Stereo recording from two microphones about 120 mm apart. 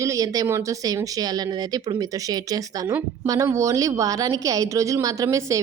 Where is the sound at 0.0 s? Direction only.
25° right (ahead or behind).